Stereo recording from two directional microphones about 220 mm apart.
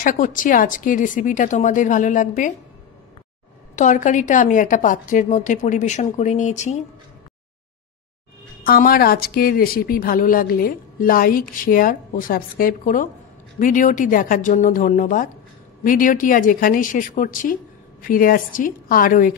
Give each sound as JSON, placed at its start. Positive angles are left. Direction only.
{"t": 0.0, "sound": "speech", "side_deg": 35}
{"t": 3.7, "sound": "speech", "side_deg": 35}
{"t": 8.6, "sound": "speech", "side_deg": 40}